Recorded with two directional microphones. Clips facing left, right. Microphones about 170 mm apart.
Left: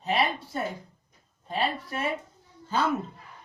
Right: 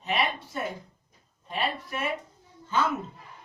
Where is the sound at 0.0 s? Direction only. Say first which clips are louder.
Left 2 dB; 35° left (ahead or behind).